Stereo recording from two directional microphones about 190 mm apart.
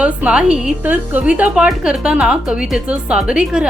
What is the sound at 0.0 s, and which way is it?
A woman's voice, 5° right (ahead or behind).